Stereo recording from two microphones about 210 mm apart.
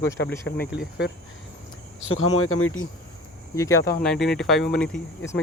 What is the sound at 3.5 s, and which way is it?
Speech, 15° left (ahead or behind).